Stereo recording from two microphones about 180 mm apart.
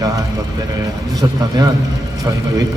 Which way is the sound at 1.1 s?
20° right (ahead or behind).